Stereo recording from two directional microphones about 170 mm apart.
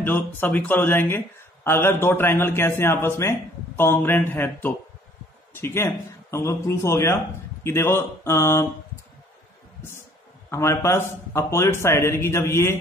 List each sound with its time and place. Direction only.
0.0 s speech: 10° left (ahead or behind)
10.5 s speech: 15° left (ahead or behind)